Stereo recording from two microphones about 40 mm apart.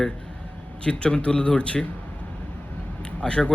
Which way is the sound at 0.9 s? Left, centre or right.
Left.